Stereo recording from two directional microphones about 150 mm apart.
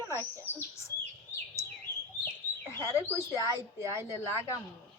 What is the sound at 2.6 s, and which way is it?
Bird, 15° left (ahead or behind).